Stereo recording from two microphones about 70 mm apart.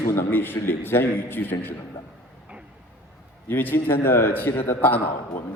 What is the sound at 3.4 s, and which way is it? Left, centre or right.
A man's voice, left.